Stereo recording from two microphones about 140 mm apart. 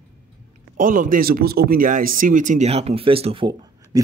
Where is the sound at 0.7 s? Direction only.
70° right (ahead or behind); by 3.4 s 40° right (ahead or behind).